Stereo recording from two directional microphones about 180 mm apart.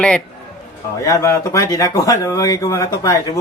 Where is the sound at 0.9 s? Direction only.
15° left (ahead or behind).